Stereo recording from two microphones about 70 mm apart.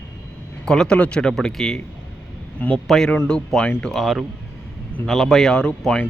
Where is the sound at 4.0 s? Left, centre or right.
Centre.